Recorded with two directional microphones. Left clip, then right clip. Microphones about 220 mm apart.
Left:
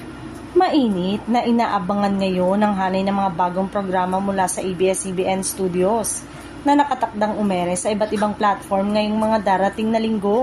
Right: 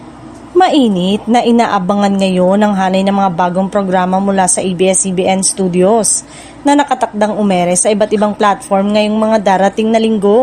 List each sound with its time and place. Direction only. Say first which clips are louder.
0.6 s a woman's voice: right 8 dB; 45° right (ahead or behind)